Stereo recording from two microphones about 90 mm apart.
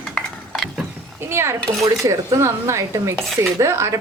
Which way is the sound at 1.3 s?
30° right (ahead or behind).